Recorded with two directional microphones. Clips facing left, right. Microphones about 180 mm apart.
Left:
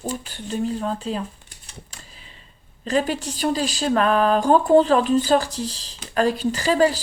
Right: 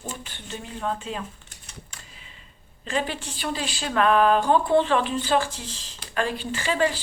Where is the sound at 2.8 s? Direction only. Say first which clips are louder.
Left 6 dB; 40° left (ahead or behind).